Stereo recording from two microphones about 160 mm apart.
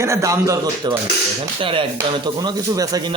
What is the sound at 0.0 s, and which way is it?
A man's voice, 20° right (ahead or behind).